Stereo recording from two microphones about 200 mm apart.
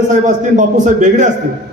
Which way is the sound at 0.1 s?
40° right (ahead or behind).